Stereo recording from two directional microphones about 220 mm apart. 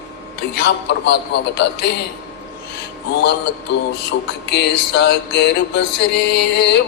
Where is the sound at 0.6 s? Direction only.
50° left (ahead or behind).